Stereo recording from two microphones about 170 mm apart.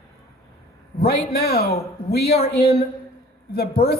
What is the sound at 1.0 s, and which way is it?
Speech, 65° left (ahead or behind).